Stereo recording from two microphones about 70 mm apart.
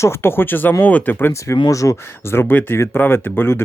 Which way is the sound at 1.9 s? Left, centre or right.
Left.